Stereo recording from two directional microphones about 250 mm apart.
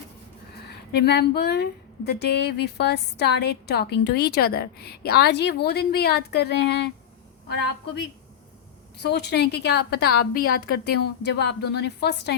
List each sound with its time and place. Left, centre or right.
0.9 s a woman's voice: left
9.0 s a woman's voice: left